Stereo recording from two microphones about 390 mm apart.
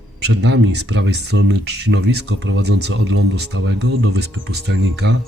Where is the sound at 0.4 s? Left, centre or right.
Right.